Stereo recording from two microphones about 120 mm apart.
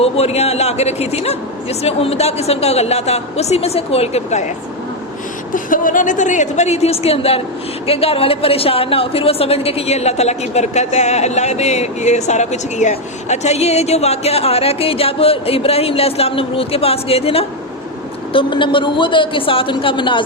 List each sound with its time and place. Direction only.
0.0 s a woman's voice: 60° left (ahead or behind)
5.5 s a woman's voice: 90° left; by 17.4 s 55° left (ahead or behind)
18.3 s a woman's voice: 45° left (ahead or behind)